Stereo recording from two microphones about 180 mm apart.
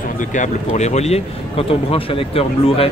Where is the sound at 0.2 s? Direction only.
45° left (ahead or behind).